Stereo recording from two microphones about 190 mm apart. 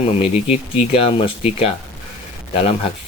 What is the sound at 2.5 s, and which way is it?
Speech, 30° left (ahead or behind).